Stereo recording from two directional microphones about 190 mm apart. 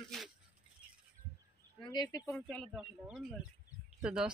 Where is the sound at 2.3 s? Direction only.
5° left (ahead or behind).